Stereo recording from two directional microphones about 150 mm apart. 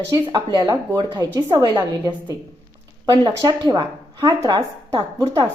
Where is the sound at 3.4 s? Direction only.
25° right (ahead or behind).